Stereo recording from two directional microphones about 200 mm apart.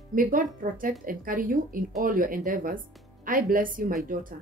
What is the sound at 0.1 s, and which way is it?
Speech, 45° right (ahead or behind).